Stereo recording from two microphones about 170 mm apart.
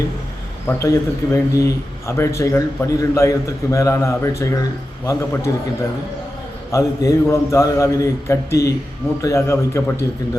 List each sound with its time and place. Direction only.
0.7 s speech: 15° left (ahead or behind)
6.7 s speech: 20° left (ahead or behind)